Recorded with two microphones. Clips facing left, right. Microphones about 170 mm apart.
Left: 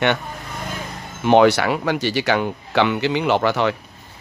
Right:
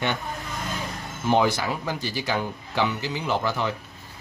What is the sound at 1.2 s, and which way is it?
Speech, 70° left (ahead or behind).